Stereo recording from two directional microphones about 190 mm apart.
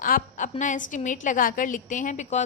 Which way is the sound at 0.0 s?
45° left (ahead or behind).